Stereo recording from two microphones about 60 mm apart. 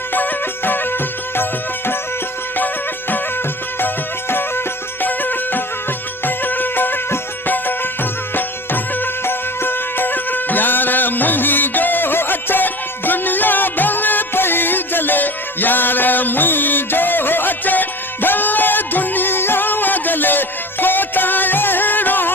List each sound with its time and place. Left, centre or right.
0.1 s music: left
3.8 s music: left